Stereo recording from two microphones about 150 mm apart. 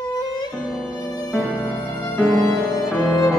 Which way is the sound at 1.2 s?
Centre (ahead or behind).